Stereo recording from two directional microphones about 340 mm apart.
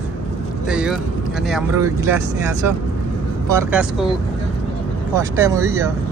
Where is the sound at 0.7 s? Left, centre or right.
Centre.